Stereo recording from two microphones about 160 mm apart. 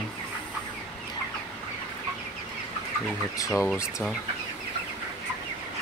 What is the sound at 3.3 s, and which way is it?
Speech, 20° left (ahead or behind).